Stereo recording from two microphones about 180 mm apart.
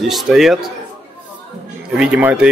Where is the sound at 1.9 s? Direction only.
5° right (ahead or behind).